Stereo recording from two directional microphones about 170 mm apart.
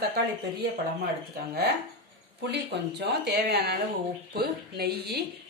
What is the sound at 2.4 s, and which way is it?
Speech, 75° right (ahead or behind).